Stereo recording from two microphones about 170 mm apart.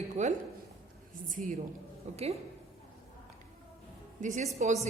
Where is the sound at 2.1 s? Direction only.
40° right (ahead or behind).